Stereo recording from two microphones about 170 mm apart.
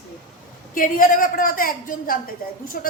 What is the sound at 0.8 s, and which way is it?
A woman's voice, 55° left (ahead or behind).